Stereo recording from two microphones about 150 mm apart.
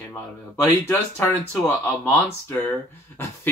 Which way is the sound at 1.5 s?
15° left (ahead or behind).